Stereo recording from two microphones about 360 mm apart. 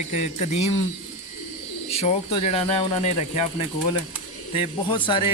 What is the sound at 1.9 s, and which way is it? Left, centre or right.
Speech, centre.